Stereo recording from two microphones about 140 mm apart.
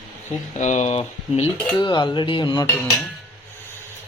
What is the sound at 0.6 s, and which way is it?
Speech, 55° left (ahead or behind).